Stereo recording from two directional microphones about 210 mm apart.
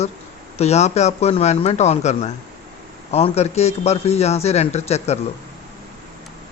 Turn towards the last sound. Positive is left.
turn(degrees=30)  # may be behind; listen again after turning